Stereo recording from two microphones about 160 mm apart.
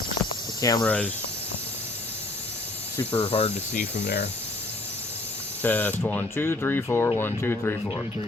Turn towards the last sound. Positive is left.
turn(degrees=15)  # may be behind; listen again after turning